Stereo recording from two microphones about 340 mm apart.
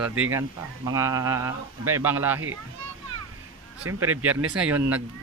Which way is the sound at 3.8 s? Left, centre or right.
Right.